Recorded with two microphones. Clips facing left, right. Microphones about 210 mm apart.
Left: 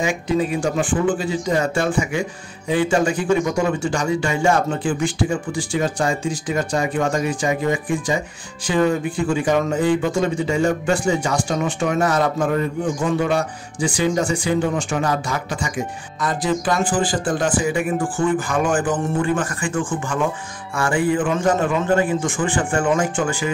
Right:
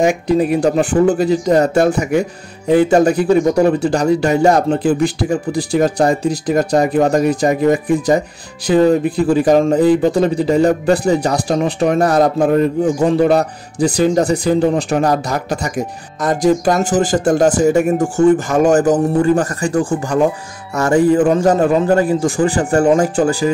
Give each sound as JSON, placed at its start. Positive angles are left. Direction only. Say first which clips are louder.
{"t": 0.0, "sound": "speech", "louder": "right 7 dB", "side_deg": -60}
{"t": 0.9, "sound": "speech", "louder": "right 7 dB", "side_deg": -40}